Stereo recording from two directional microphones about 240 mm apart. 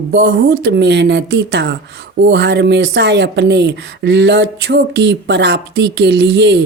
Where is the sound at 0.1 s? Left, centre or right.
Right.